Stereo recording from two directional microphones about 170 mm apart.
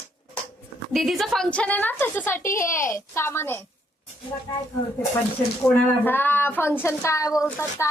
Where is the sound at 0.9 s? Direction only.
Centre (ahead or behind); by 4.6 s 20° left (ahead or behind).